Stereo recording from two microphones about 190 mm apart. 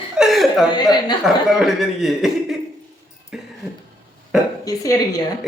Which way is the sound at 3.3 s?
5° right (ahead or behind).